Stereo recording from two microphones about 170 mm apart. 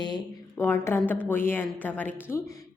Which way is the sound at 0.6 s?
15° left (ahead or behind).